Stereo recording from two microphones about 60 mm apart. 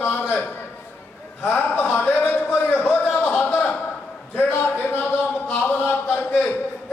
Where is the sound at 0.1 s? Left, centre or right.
Left.